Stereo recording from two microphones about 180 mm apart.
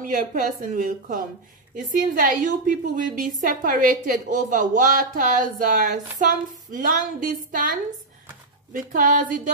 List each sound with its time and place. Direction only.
0.0 s a woman's voice: 45° right (ahead or behind)
8.7 s a woman's voice: 50° right (ahead or behind)